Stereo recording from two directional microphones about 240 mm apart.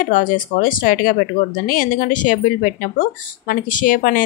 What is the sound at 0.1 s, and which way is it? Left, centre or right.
Speech, left.